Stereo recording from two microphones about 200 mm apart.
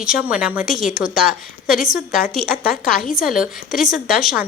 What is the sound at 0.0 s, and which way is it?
A woman's voice, 5° right (ahead or behind).